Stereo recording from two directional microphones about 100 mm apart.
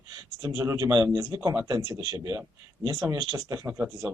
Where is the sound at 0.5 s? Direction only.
30° right (ahead or behind).